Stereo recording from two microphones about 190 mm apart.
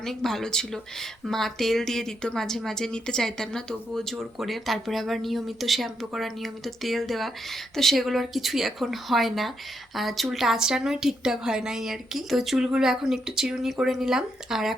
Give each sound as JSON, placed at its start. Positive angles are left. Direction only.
{"t": 0.0, "sound": "speech", "side_deg": 0}